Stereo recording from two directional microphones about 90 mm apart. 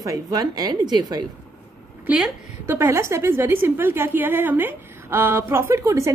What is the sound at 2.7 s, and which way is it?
A woman's voice, 30° right (ahead or behind).